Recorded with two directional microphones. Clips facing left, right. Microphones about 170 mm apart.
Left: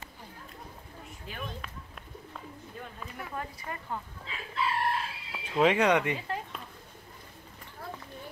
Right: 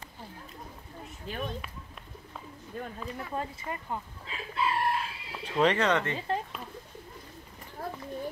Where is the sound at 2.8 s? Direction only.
50° right (ahead or behind).